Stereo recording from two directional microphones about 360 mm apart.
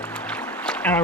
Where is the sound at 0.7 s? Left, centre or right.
Centre.